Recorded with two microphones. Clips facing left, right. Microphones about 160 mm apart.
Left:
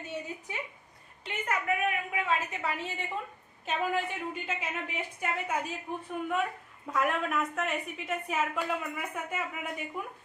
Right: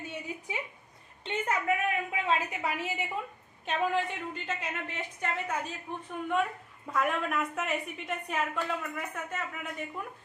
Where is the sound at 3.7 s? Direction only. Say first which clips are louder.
Right 1 dB; 5° left (ahead or behind).